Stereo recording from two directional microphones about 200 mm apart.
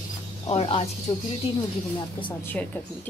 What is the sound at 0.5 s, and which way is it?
Speech, 30° left (ahead or behind).